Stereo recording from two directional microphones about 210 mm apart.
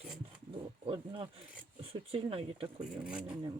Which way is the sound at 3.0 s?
5° right (ahead or behind).